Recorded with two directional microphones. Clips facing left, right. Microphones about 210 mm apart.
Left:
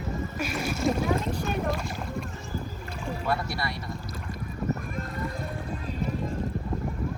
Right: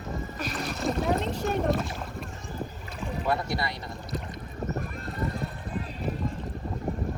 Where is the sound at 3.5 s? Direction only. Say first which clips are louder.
Right 2 dB; 20° right (ahead or behind).